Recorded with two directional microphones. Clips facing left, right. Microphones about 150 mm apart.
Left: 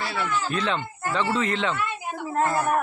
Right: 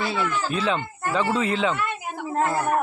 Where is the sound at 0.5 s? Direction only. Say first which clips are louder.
Right 2 dB; 5° right (ahead or behind).